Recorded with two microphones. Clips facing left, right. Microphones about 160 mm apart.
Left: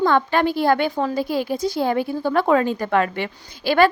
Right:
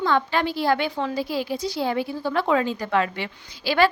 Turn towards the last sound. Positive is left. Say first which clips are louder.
# left 5 dB
turn(degrees=50)  # may be behind; listen again after turning